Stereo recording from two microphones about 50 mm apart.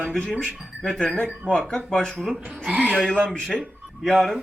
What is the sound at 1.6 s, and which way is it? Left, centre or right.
Speech, centre.